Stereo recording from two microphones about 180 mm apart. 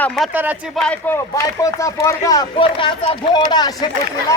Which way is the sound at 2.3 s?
25° left (ahead or behind).